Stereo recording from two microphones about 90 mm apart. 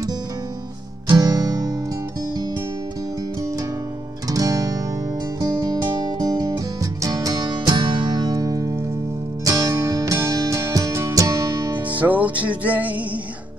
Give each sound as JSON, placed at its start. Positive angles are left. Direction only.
{"t": 1.1, "sound": "music", "side_deg": -40}
{"t": 4.3, "sound": "music", "side_deg": -40}
{"t": 12.0, "sound": "music", "side_deg": -15}